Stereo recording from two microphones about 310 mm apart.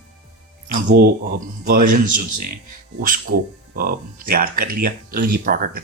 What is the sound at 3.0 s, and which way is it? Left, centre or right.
Speech, right.